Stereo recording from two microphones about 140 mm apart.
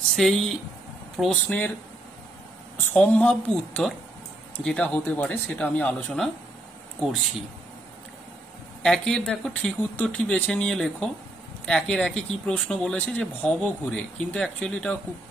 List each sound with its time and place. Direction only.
0.1 s speech: centre (ahead or behind)
2.9 s speech: 10° left (ahead or behind)
7.0 s speech: 5° right (ahead or behind)
8.8 s speech: 5° left (ahead or behind)